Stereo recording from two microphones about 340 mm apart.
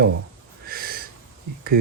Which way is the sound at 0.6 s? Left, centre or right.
Right.